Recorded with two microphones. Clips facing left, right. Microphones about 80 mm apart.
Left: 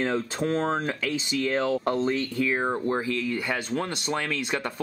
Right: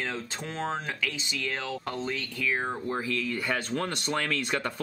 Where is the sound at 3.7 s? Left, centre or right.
Centre.